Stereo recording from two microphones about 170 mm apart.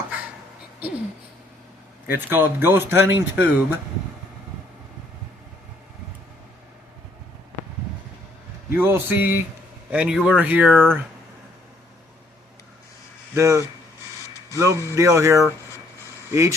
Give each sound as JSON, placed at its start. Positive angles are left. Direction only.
{"t": 2.0, "sound": "speech", "side_deg": -10}
{"t": 8.7, "sound": "speech", "side_deg": -10}
{"t": 13.3, "sound": "speech", "side_deg": -15}